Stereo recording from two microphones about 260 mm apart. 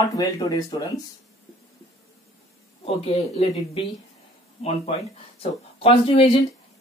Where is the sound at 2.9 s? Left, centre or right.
Left.